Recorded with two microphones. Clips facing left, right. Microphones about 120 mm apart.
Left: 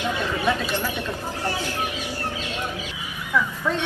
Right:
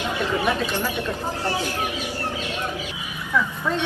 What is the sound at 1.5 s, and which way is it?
Speech, 15° right (ahead or behind).